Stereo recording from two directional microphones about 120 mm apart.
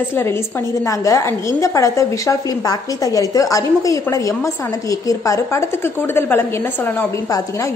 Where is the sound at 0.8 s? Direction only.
25° left (ahead or behind).